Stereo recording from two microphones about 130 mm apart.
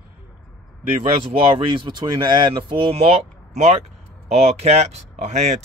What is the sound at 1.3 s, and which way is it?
Speech, 40° right (ahead or behind).